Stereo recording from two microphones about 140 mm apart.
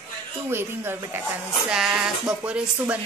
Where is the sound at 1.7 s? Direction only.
5° right (ahead or behind).